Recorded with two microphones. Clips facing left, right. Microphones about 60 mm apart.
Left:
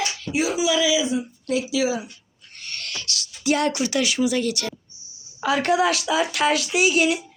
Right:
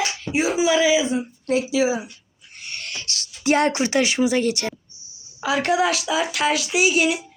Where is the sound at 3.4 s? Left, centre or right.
Right.